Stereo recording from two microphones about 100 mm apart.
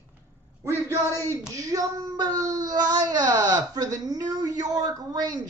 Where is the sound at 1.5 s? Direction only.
35° right (ahead or behind).